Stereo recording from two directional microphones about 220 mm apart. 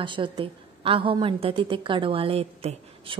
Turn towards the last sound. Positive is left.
turn(degrees=-25)  # may be behind; listen again after turning